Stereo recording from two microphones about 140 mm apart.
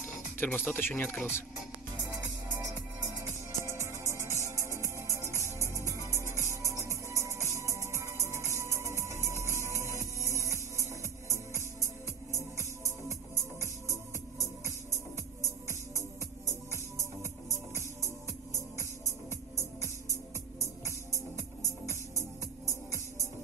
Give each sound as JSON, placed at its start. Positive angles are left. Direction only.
{"t": 0.4, "sound": "speech", "side_deg": 15}
{"t": 3.2, "sound": "music", "side_deg": -20}
{"t": 4.0, "sound": "music", "side_deg": 20}
{"t": 7.9, "sound": "music", "side_deg": -20}
{"t": 11.8, "sound": "music", "side_deg": 20}
{"t": 14.4, "sound": "music", "side_deg": 20}